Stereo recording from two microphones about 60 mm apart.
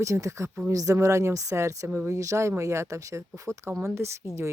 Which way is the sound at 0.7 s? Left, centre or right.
Right.